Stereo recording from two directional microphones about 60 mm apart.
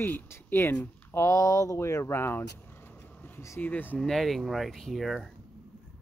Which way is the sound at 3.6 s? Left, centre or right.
Left.